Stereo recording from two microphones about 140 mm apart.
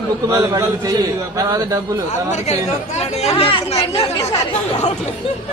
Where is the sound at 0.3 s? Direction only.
20° right (ahead or behind).